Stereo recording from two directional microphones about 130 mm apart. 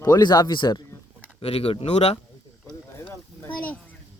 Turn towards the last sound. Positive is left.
turn(degrees=15)  # may be behind; listen again after turning